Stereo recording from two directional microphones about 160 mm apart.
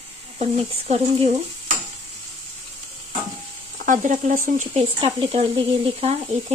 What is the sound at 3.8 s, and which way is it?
Stir, 55° right (ahead or behind).